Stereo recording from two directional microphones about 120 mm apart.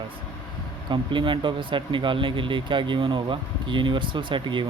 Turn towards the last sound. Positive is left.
turn(degrees=-40)  # may be behind; listen again after turning